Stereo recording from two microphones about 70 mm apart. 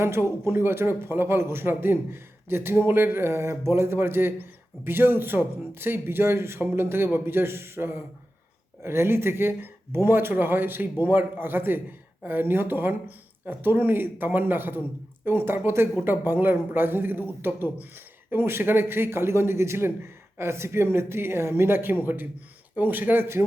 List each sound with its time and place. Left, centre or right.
0.0 s speech: right